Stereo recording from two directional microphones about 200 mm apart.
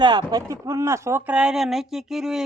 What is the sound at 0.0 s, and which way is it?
Speech, 20° right (ahead or behind).